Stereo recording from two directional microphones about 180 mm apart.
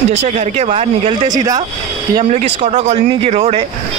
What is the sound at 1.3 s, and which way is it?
Speech, 20° right (ahead or behind).